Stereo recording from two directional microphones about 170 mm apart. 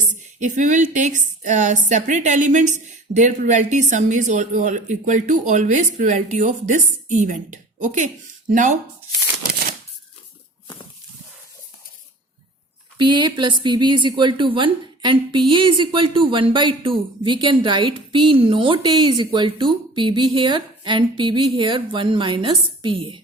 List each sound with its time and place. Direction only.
0.1 s a woman's voice: 45° right (ahead or behind)
13.0 s a woman's voice: 25° right (ahead or behind)